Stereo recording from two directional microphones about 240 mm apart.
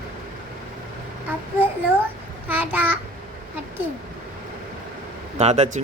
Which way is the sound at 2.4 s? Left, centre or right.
Centre.